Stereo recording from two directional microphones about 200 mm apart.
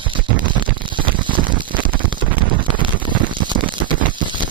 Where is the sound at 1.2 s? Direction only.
25° right (ahead or behind).